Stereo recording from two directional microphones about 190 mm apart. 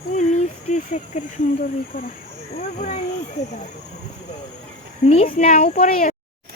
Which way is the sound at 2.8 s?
35° left (ahead or behind).